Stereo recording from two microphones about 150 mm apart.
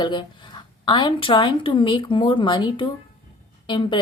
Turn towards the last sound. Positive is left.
turn(degrees=35)  # may be behind; listen again after turning